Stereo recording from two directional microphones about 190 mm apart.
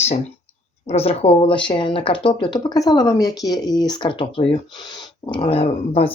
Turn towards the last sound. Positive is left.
turn(degrees=30)  # may be behind; listen again after turning